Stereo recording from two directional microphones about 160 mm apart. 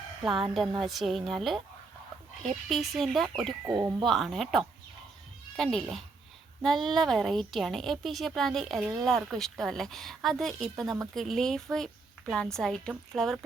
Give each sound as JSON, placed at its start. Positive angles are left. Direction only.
{"t": 0.2, "sound": "a woman's voice", "side_deg": 0}
{"t": 3.7, "sound": "speech", "side_deg": -25}
{"t": 4.0, "sound": "a woman's voice", "side_deg": 0}